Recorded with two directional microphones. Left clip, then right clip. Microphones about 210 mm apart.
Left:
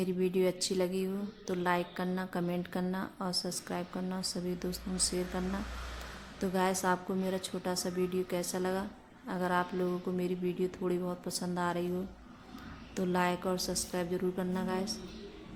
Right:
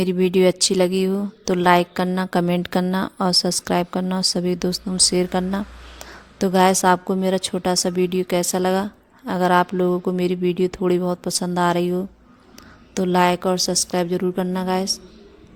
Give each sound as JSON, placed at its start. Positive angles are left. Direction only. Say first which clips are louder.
{"t": 0.0, "sound": "a woman's voice", "louder": "right 14 dB", "side_deg": -45}